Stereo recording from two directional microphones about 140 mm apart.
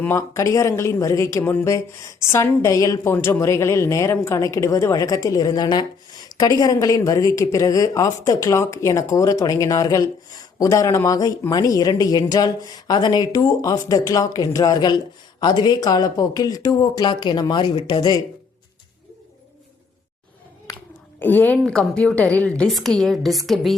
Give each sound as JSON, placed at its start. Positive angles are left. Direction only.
{"t": 0.0, "sound": "speech", "side_deg": 20}
{"t": 20.7, "sound": "a sound", "side_deg": 25}
{"t": 21.2, "sound": "a woman's voice", "side_deg": 10}